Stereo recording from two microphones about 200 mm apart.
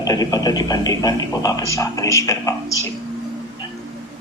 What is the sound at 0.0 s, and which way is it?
A man's voice, 20° left (ahead or behind).